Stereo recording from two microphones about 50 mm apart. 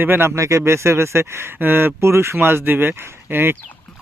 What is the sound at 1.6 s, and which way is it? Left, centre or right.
Speech, right.